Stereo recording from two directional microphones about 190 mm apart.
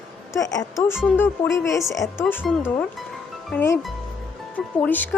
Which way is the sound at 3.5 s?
15° left (ahead or behind).